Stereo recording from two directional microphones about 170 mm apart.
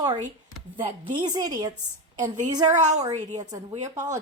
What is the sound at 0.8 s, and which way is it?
Speech, 35° right (ahead or behind).